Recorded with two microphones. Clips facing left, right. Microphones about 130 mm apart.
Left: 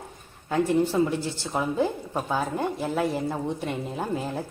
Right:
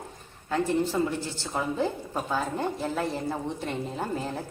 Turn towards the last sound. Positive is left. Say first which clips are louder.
# left 2 dB
turn(degrees=10)  # may be behind; listen again after turning